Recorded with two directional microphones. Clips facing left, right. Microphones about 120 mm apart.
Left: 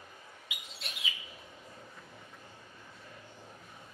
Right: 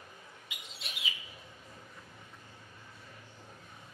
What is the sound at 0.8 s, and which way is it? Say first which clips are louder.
Bird: left 1 dB; centre (ahead or behind).